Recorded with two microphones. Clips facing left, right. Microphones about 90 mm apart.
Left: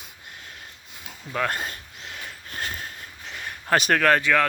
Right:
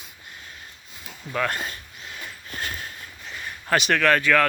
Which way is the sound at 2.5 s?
40° left (ahead or behind).